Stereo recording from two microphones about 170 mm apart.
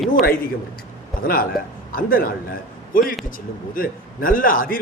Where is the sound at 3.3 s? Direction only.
55° left (ahead or behind).